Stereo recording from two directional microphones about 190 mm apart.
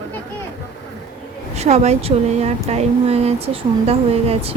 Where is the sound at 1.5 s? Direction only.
35° right (ahead or behind).